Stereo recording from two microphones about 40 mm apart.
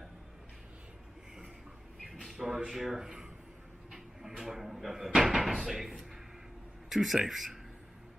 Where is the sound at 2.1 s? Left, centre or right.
Centre.